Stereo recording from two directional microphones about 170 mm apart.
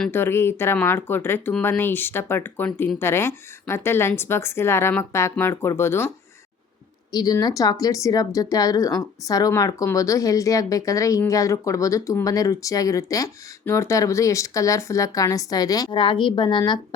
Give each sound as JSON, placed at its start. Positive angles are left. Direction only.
{"t": 0.1, "sound": "a woman's voice", "side_deg": 15}
{"t": 7.1, "sound": "speech", "side_deg": 20}